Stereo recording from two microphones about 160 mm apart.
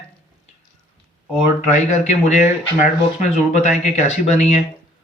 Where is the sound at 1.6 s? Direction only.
45° left (ahead or behind).